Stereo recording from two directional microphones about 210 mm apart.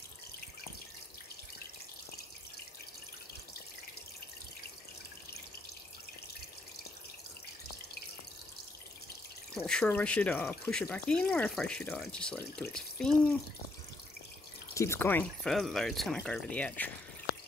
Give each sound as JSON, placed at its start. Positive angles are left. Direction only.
{"t": 9.5, "sound": "speech", "side_deg": 5}
{"t": 14.7, "sound": "speech", "side_deg": 15}